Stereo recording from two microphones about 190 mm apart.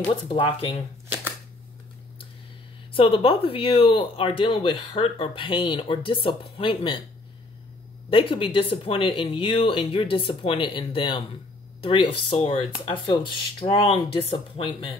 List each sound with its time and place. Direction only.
0.0 s speech: 25° left (ahead or behind)
2.9 s speech: 30° left (ahead or behind)
8.1 s speech: 25° left (ahead or behind)